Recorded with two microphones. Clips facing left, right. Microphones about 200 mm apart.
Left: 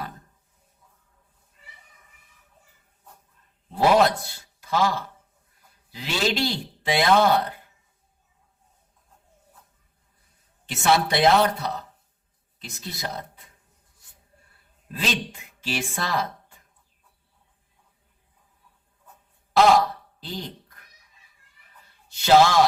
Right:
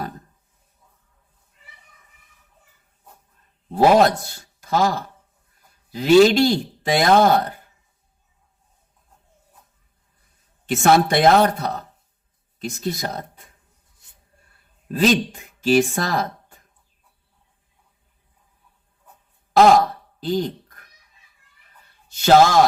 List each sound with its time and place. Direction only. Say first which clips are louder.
3.7 s speech: right 4 dB; 45° right (ahead or behind)
10.7 s speech: right 6 dB; 50° right (ahead or behind)
14.8 s speech: right 11 dB; 45° right (ahead or behind)
19.5 s a sound: right 4 dB; 45° right (ahead or behind)
22.1 s speech: right 3 dB; 45° right (ahead or behind)